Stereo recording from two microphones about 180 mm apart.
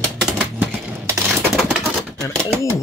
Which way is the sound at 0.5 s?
15° right (ahead or behind).